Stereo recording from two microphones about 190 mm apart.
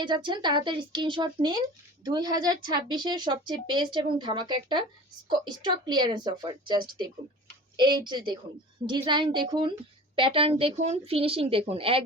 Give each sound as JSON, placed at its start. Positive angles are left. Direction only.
{"t": 0.0, "sound": "a woman's voice", "side_deg": -25}